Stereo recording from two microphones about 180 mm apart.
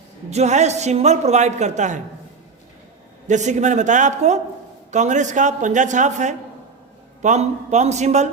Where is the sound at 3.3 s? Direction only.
40° right (ahead or behind).